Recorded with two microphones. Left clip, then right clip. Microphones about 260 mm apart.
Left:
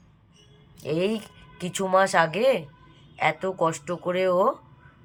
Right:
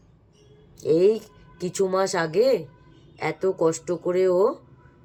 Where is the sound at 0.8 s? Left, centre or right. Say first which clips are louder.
Right 7 dB; left.